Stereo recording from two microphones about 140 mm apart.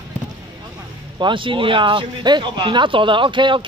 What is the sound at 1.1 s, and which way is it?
Speech, 35° right (ahead or behind).